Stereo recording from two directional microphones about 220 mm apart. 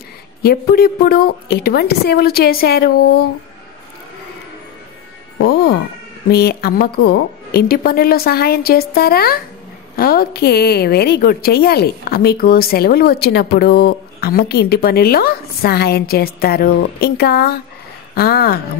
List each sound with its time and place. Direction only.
0.4 s a woman's voice: 45° left (ahead or behind)
6.2 s a woman's voice: 45° left (ahead or behind)